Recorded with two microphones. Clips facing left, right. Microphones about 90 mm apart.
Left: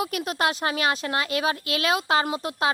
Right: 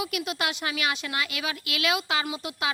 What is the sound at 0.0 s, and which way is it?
Speech, 40° left (ahead or behind).